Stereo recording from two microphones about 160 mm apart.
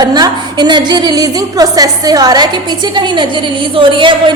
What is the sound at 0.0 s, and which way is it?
A woman's voice, 25° right (ahead or behind).